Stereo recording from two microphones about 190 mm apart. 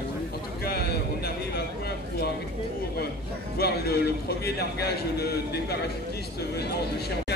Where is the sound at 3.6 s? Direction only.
55° left (ahead or behind).